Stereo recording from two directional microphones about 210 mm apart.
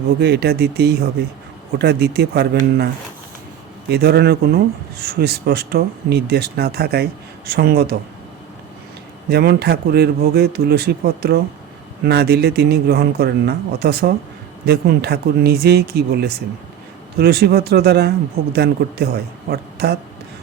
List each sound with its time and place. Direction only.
0.2 s speech: 50° right (ahead or behind)
3.8 s speech: 50° right (ahead or behind)
9.3 s speech: 50° right (ahead or behind)